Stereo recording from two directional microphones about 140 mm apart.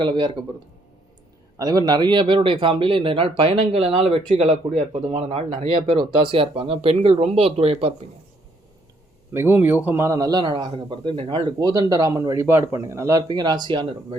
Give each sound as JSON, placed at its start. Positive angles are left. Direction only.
{"t": 0.0, "sound": "speech", "side_deg": -35}
{"t": 1.5, "sound": "speech", "side_deg": -25}
{"t": 9.3, "sound": "a man's voice", "side_deg": -15}